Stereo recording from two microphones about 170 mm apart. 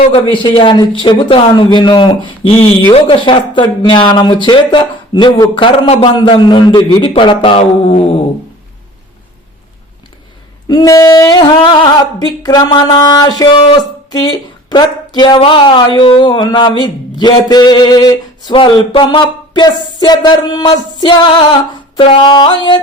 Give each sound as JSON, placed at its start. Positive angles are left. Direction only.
{"t": 0.1, "sound": "speech", "side_deg": 30}
{"t": 10.7, "sound": "speech", "side_deg": 20}